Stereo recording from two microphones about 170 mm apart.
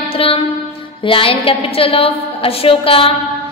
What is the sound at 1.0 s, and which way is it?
A woman's voice, 30° left (ahead or behind).